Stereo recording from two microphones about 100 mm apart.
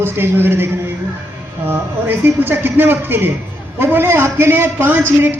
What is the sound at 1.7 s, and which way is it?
A man's voice, 20° right (ahead or behind).